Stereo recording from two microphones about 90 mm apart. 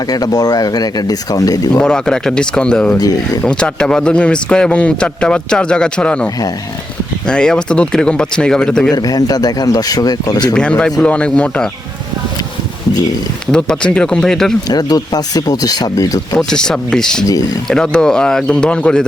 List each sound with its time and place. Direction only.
0.1 s speech: 45° left (ahead or behind)
1.8 s speech: 10° left (ahead or behind)
3.0 s speech: 45° left (ahead or behind)
3.4 s speech: 10° left (ahead or behind)
9.0 s speech: 45° left (ahead or behind)
10.5 s speech: 10° left (ahead or behind)
13.5 s speech: 10° left (ahead or behind)
14.7 s speech: 45° left (ahead or behind)
16.5 s speech: 10° left (ahead or behind)